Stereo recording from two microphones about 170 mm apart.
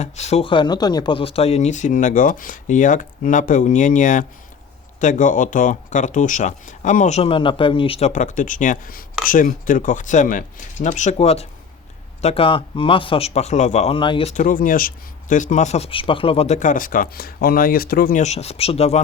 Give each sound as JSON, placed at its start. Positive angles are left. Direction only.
{"t": 0.0, "sound": "speech", "side_deg": 40}
{"t": 14.3, "sound": "speech", "side_deg": 50}